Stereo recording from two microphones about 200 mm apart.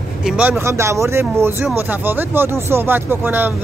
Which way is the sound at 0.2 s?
5° right (ahead or behind).